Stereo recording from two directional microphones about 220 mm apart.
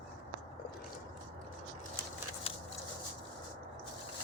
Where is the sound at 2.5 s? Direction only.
25° left (ahead or behind).